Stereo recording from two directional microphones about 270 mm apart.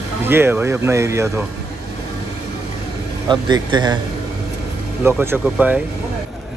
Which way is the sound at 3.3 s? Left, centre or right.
Centre.